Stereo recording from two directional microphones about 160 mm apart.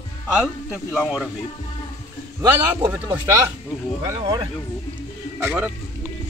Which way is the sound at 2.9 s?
20° right (ahead or behind).